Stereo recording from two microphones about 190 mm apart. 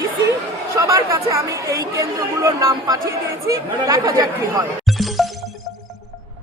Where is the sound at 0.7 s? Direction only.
15° right (ahead or behind).